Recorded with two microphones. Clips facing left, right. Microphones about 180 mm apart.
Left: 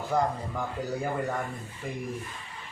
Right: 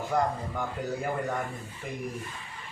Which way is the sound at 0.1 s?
Centre (ahead or behind).